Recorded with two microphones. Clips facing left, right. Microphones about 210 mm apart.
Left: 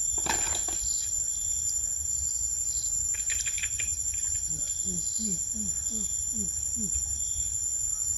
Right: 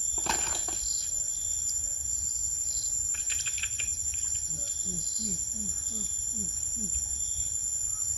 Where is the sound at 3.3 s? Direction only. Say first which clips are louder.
Left 1 dB; 10° left (ahead or behind).